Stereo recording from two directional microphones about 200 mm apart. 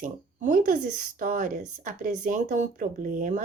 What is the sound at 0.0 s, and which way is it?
A woman's voice, 45° right (ahead or behind).